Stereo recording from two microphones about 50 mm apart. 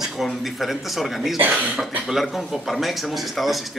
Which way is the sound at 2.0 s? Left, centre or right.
Centre.